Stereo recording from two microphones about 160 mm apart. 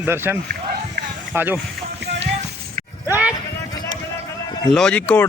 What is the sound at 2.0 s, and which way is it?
Music, 90° right.